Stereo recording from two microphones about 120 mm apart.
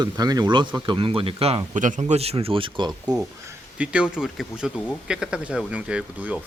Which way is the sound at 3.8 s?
10° right (ahead or behind).